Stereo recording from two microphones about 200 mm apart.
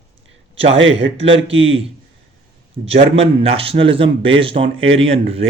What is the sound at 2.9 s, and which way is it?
A man's voice, 30° right (ahead or behind).